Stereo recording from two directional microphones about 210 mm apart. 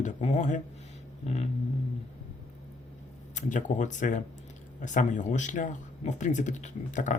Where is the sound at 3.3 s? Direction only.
35° left (ahead or behind).